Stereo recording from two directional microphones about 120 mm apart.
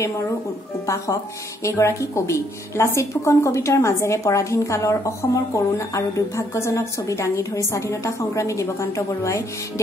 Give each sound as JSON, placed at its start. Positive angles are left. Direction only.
{"t": 0.8, "sound": "a woman's voice", "side_deg": 25}